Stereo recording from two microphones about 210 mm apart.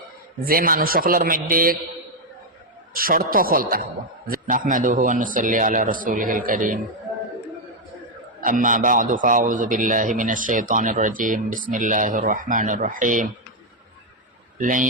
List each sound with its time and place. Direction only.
0.4 s a man's voice: 45° right (ahead or behind)
2.9 s a man's voice: 45° right (ahead or behind)
8.4 s a man's voice: 40° right (ahead or behind)
14.6 s a man's voice: 40° right (ahead or behind)